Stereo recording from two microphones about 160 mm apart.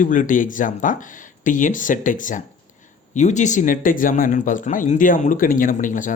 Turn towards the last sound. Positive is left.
turn(degrees=55)  # may be behind; listen again after turning